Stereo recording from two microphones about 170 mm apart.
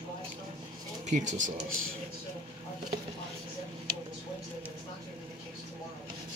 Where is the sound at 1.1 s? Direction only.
45° right (ahead or behind).